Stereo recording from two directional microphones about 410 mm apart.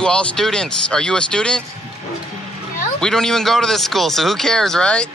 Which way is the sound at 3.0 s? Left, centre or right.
Centre.